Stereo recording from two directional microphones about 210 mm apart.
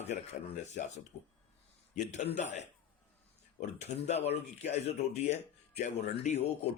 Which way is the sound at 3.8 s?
30° left (ahead or behind).